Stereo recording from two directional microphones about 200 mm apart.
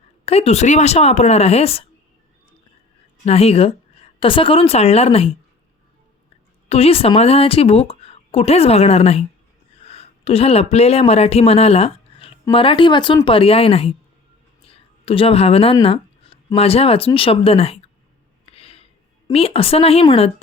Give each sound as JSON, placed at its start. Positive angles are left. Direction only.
{"t": 0.3, "sound": "a woman's voice", "side_deg": 30}
{"t": 3.2, "sound": "a woman's voice", "side_deg": 30}
{"t": 6.7, "sound": "a woman's voice", "side_deg": 30}
{"t": 18.5, "sound": "a sound", "side_deg": 30}
{"t": 19.3, "sound": "a woman's voice", "side_deg": 30}